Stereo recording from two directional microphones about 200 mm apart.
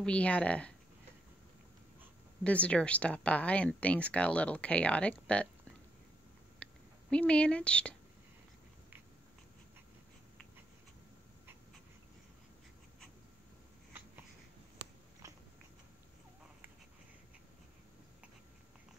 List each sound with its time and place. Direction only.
0.0 s speech: 5° left (ahead or behind)
2.4 s speech: 5° left (ahead or behind)
6.6 s speech: 5° left (ahead or behind)
15.2 s biting: 15° right (ahead or behind)